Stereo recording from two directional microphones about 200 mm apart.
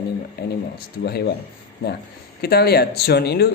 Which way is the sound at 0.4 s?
55° left (ahead or behind).